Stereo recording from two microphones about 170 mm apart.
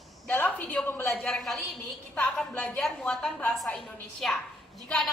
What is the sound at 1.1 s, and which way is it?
A woman's voice, centre (ahead or behind).